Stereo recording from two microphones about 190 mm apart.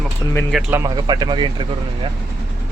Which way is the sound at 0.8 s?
20° right (ahead or behind).